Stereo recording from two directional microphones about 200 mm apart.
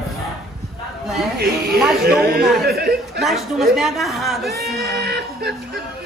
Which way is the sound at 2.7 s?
55° right (ahead or behind).